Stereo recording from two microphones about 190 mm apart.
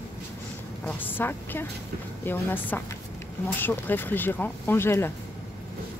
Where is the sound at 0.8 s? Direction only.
10° left (ahead or behind).